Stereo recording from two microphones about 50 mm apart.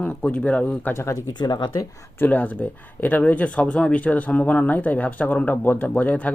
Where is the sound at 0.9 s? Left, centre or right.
Left.